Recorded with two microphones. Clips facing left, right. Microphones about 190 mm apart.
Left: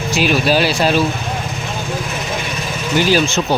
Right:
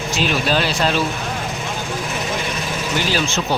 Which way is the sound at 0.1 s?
10° left (ahead or behind).